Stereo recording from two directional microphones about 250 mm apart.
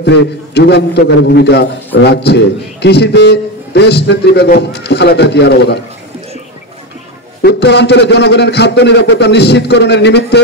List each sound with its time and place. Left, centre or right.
0.0 s a man's voice: left
7.4 s a man's voice: left